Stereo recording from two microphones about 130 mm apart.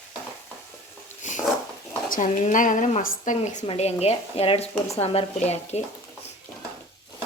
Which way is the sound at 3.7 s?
55° left (ahead or behind).